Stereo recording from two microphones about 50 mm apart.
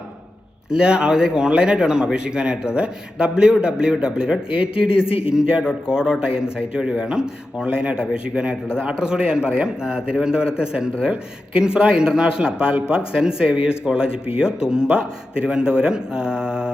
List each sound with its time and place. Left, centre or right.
0.7 s a man's voice: centre